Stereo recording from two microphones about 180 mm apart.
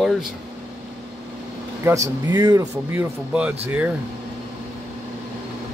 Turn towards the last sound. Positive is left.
turn(degrees=-5)  # may be behind; listen again after turning